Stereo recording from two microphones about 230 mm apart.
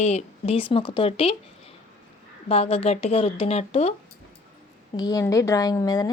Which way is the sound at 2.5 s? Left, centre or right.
Left.